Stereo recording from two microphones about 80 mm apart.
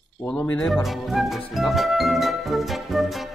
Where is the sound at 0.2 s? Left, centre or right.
Centre.